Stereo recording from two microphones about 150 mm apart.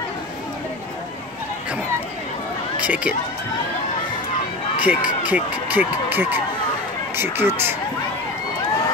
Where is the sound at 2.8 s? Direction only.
10° right (ahead or behind).